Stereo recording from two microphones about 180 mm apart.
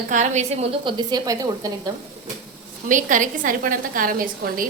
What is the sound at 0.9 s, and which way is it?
A woman's voice, 20° right (ahead or behind).